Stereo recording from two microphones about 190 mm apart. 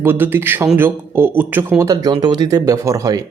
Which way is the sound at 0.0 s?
10° right (ahead or behind).